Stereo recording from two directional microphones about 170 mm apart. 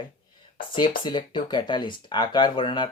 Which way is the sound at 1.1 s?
25° left (ahead or behind).